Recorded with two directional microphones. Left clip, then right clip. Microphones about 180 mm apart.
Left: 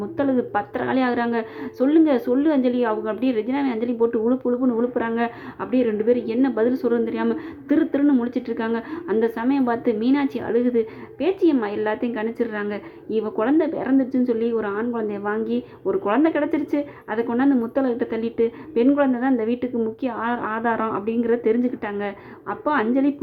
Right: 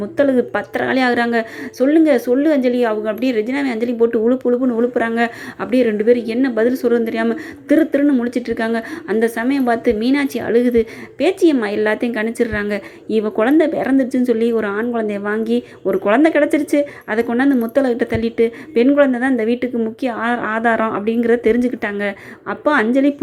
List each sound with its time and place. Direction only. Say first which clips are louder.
0.2 s a woman's voice: right 7 dB; 25° right (ahead or behind)